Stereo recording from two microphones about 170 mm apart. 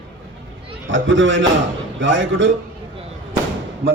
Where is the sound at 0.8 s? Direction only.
90° right.